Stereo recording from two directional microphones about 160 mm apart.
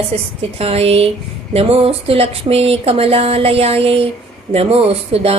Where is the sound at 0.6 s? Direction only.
40° right (ahead or behind).